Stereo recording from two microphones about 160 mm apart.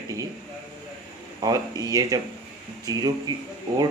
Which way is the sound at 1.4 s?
25° right (ahead or behind).